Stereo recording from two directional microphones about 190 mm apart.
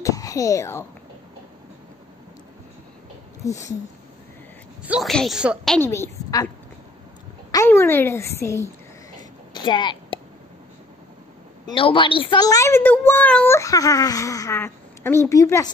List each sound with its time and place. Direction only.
0.0 s speech: 15° left (ahead or behind)
3.4 s a woman's voice: 15° left (ahead or behind)
4.8 s a woman's voice: 5° right (ahead or behind)
5.8 s a woman's voice: 15° left (ahead or behind)
7.5 s a woman's voice: 15° left (ahead or behind)
9.5 s a sound: 25° left (ahead or behind)
11.6 s a woman's voice: 25° left (ahead or behind)